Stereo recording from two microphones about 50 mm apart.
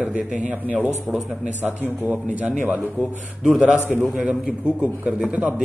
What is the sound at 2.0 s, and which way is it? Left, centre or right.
Speech, right.